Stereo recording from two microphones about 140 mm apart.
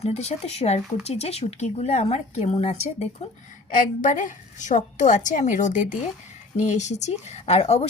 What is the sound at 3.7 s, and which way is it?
A woman's voice, 75° left (ahead or behind).